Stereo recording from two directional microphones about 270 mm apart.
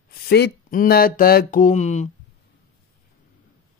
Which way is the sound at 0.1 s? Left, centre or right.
Left.